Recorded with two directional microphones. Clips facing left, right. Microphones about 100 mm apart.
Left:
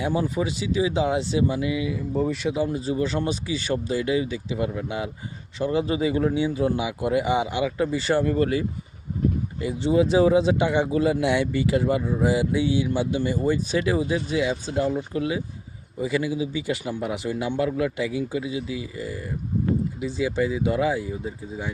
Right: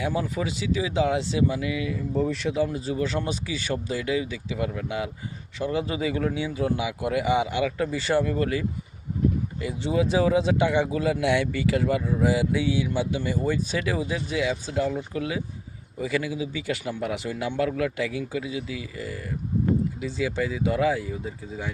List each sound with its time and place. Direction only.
0.0 s a man's voice: 25° left (ahead or behind); by 2.6 s 10° left (ahead or behind)
2.7 s a man's voice: 25° left (ahead or behind)
8.2 s speech: 40° left (ahead or behind)
9.6 s a man's voice: 30° left (ahead or behind)